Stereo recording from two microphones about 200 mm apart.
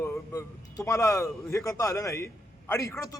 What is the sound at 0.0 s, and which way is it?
A man's voice, 15° left (ahead or behind).